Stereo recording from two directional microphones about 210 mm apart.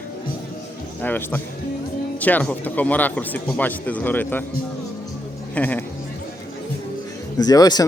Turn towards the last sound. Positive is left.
turn(degrees=20)  # may be behind; listen again after turning